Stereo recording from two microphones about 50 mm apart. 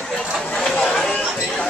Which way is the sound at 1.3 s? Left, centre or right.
Centre.